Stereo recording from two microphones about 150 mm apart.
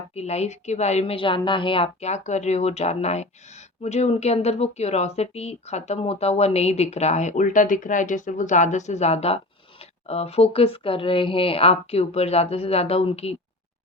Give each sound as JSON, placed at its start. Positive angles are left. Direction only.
{"t": 0.1, "sound": "speech", "side_deg": 45}